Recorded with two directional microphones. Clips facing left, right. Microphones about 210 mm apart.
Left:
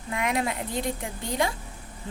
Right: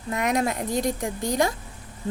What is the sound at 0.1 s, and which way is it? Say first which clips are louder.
A woman's voice: right 3 dB; 45° right (ahead or behind).